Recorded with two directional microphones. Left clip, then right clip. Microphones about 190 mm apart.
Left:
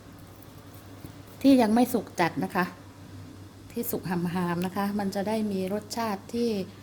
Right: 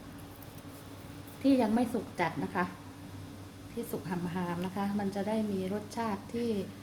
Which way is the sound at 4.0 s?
65° left (ahead or behind).